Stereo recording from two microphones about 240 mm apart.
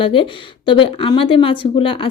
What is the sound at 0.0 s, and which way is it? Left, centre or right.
Speech, left.